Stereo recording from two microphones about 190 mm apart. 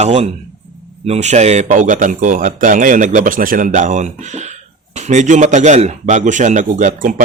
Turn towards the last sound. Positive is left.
turn(degrees=-45)  # may be behind; listen again after turning